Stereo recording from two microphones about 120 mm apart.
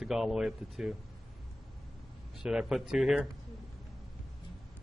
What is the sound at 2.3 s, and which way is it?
Speech, 5° right (ahead or behind).